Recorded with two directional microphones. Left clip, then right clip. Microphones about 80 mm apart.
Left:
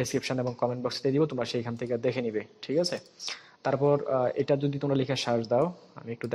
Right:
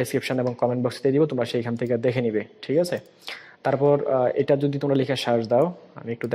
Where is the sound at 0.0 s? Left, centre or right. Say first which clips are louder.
Right 5 dB; right.